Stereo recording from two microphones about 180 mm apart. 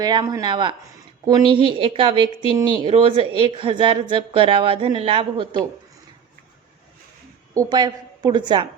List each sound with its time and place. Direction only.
0.0 s a woman's voice: 25° right (ahead or behind)
7.5 s a woman's voice: 20° right (ahead or behind)